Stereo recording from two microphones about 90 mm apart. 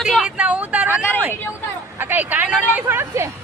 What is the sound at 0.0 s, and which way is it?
Vehicle, 5° right (ahead or behind).